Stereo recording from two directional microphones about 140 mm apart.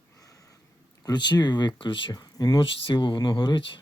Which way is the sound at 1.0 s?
30° left (ahead or behind).